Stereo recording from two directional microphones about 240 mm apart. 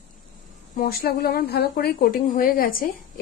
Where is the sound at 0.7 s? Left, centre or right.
Left.